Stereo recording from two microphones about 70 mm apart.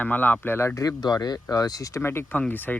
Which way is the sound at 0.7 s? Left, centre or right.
Left.